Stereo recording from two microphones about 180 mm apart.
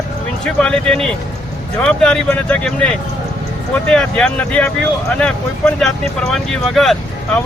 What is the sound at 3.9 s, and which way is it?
Speech, 5° left (ahead or behind).